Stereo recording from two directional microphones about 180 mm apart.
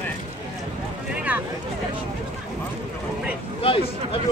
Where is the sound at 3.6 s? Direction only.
30° left (ahead or behind).